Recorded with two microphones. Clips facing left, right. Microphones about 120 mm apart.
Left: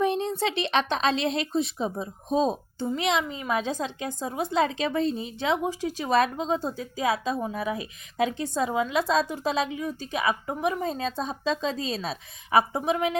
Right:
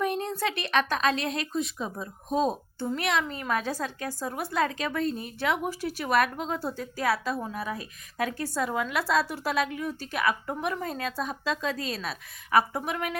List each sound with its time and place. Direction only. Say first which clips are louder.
0.0 s a woman's voice: left 3 dB; 30° left (ahead or behind)